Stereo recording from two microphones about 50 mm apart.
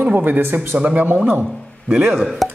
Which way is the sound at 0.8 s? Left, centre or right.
Right.